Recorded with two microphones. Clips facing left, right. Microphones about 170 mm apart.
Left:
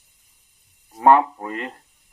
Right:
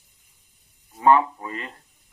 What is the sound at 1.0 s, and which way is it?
Speech, 55° left (ahead or behind).